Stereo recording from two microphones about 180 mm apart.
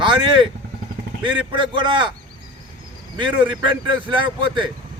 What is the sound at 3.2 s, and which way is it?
Speech, 25° right (ahead or behind).